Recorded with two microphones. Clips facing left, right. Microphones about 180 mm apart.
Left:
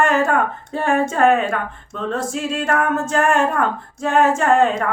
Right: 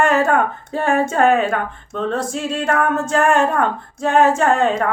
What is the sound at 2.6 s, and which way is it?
Music, 30° right (ahead or behind).